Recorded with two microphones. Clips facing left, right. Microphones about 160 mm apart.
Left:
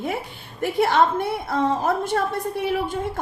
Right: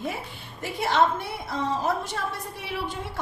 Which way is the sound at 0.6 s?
55° left (ahead or behind).